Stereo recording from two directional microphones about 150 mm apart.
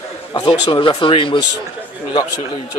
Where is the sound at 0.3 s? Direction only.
35° left (ahead or behind).